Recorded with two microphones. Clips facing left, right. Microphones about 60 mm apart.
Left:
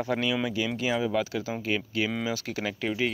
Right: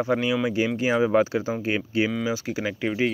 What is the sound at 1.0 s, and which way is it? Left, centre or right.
Speech, right.